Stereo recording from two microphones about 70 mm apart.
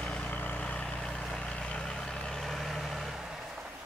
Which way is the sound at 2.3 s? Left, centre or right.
Centre.